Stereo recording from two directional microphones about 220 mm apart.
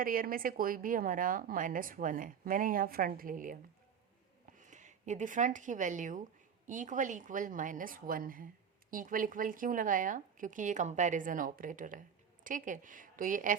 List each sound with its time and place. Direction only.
0.0 s speech: 40° right (ahead or behind)